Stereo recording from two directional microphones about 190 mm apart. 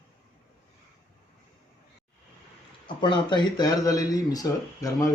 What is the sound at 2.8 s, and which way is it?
Speech, 25° left (ahead or behind).